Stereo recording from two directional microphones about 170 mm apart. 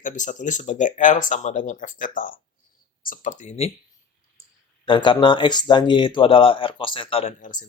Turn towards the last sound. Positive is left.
turn(degrees=50)  # may be behind; listen again after turning